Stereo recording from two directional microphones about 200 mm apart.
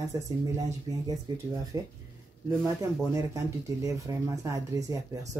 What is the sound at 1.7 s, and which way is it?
Speech, 15° right (ahead or behind).